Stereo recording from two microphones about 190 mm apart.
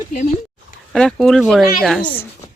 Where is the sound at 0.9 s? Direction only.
Centre (ahead or behind).